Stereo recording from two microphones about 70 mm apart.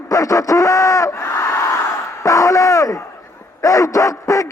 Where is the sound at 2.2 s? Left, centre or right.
Left.